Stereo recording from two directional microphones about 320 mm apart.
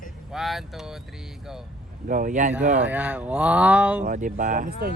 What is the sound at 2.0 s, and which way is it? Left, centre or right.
Speech, right.